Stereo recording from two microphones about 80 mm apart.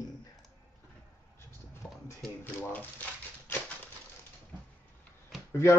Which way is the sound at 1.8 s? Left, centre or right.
Left.